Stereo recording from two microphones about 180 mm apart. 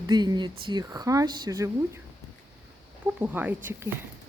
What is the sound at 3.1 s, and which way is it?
Speech, 10° right (ahead or behind).